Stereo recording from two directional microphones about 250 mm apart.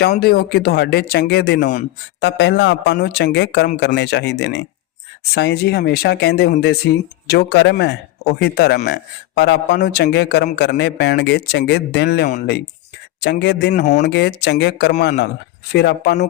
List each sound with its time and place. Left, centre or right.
0.1 s speech: left
14.0 s speech: left